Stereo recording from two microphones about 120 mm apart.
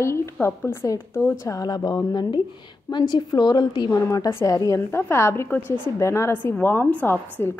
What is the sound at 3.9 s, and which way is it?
A woman's voice, 25° left (ahead or behind).